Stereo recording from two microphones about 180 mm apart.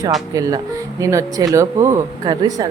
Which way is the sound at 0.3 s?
20° right (ahead or behind).